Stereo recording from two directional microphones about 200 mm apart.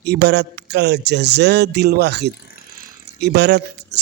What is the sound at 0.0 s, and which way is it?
Speech, 55° right (ahead or behind).